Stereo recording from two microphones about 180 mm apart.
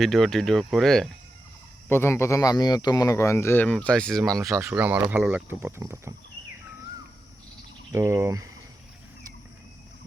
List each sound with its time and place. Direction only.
0.0 s speech: centre (ahead or behind)
1.9 s speech: 15° left (ahead or behind)
4.3 s speech: 20° right (ahead or behind)
4.6 s speech: 10° right (ahead or behind)
7.9 s speech: 15° right (ahead or behind)